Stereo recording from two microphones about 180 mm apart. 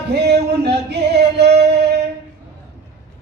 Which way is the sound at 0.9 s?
65° right (ahead or behind).